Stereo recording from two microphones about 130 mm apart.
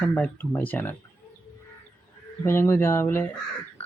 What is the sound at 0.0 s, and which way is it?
Speech, 10° left (ahead or behind).